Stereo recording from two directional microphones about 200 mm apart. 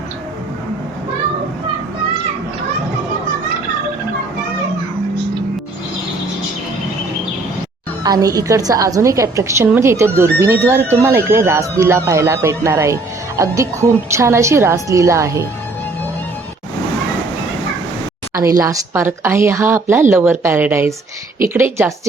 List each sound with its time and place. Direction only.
8.0 s speech: 20° right (ahead or behind)
18.3 s speech: 15° right (ahead or behind)